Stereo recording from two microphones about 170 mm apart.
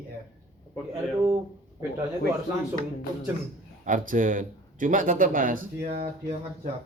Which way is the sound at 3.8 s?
50° right (ahead or behind).